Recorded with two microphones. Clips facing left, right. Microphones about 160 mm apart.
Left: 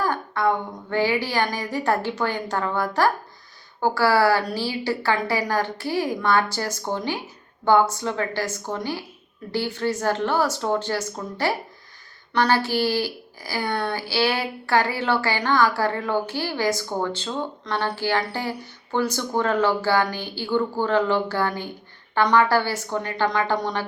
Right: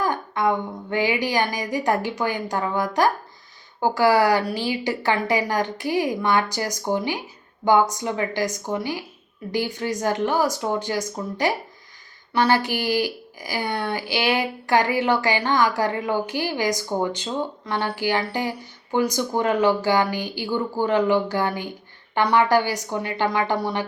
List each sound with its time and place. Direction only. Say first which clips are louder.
0.0 s a woman's voice: even; 15° right (ahead or behind)